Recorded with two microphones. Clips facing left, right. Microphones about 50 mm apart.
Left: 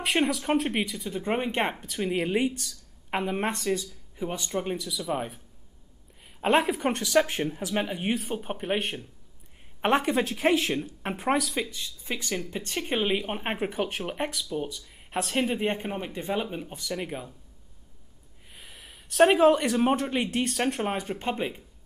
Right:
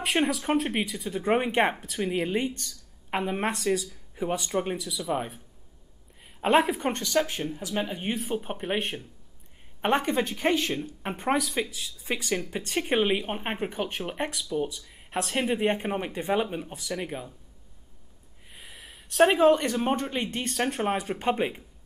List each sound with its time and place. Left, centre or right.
0.0 s speech: centre
1.3 s speech: centre
1.9 s speech: centre
4.2 s speech: centre
6.4 s speech: centre
7.5 s speech: left
7.8 s speech: centre
12.1 s speech: right
13.1 s speech: centre; by 16.3 s right
16.3 s speech: centre
18.5 s speech: centre
21.0 s speech: centre